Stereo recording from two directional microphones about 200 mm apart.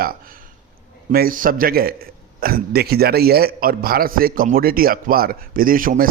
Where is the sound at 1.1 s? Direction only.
45° right (ahead or behind).